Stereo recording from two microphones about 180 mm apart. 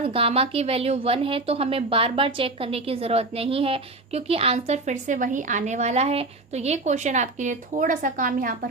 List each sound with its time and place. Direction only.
0.0 s a woman's voice: 30° right (ahead or behind); by 8.5 s 50° right (ahead or behind)